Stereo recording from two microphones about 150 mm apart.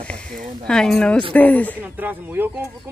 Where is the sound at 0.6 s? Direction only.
5° left (ahead or behind).